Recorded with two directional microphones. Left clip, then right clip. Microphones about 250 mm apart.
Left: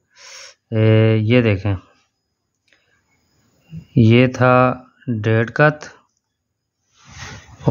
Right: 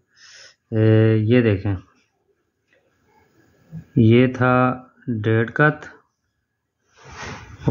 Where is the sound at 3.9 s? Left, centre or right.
Left.